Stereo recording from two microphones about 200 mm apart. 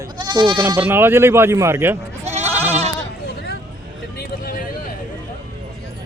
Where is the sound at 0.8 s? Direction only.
10° right (ahead or behind).